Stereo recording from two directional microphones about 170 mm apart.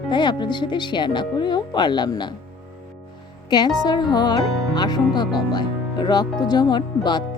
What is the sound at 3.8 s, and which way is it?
Speech, 25° left (ahead or behind).